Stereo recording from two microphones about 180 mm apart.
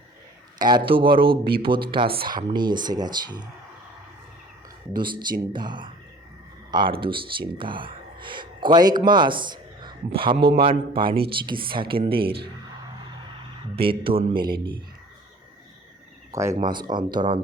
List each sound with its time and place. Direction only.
0.6 s speech: 25° right (ahead or behind)
4.9 s speech: 25° right (ahead or behind)
13.7 s speech: 30° right (ahead or behind)
16.3 s speech: 15° right (ahead or behind)